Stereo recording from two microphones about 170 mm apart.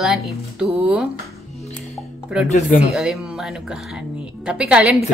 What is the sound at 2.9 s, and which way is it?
A woman's voice, 5° right (ahead or behind).